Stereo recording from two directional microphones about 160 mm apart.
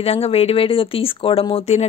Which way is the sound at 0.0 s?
40° left (ahead or behind).